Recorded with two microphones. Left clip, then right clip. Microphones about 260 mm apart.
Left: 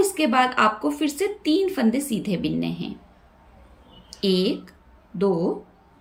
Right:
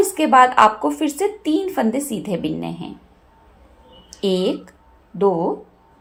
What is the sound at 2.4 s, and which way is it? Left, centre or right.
Speech, centre.